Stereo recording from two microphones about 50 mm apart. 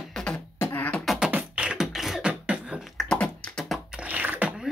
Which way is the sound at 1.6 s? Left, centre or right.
Centre.